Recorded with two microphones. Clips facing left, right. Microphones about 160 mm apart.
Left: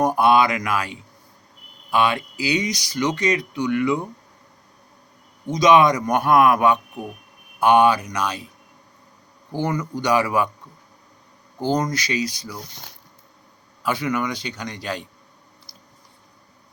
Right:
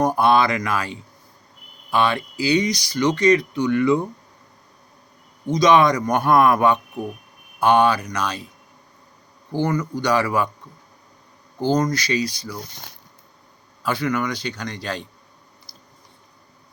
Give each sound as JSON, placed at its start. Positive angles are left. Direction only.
{"t": 0.0, "sound": "speech", "side_deg": 10}
{"t": 1.9, "sound": "speech", "side_deg": 10}
{"t": 5.5, "sound": "speech", "side_deg": 15}
{"t": 9.5, "sound": "speech", "side_deg": 15}
{"t": 11.6, "sound": "speech", "side_deg": 15}
{"t": 13.8, "sound": "speech", "side_deg": 15}
{"t": 15.7, "sound": "chewing", "side_deg": 40}